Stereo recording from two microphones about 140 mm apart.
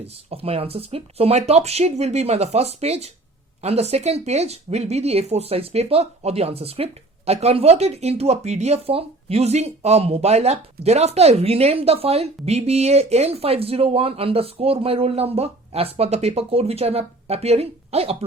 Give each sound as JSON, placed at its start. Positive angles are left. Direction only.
{"t": 0.0, "sound": "speech", "side_deg": -45}